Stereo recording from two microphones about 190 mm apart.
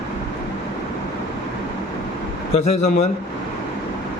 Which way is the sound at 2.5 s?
40° left (ahead or behind).